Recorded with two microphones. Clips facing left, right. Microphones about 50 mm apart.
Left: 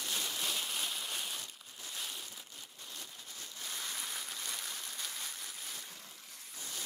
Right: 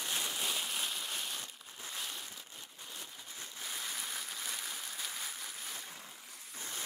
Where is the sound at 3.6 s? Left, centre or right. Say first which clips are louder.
Even; centre.